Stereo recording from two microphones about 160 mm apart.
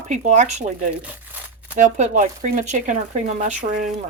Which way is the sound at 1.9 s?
50° right (ahead or behind).